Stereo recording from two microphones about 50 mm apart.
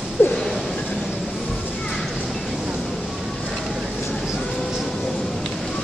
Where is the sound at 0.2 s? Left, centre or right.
Left.